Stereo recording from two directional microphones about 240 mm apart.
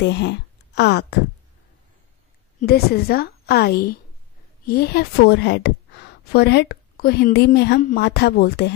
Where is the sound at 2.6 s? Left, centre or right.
Left.